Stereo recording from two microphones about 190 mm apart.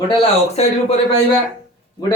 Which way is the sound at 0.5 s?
35° left (ahead or behind).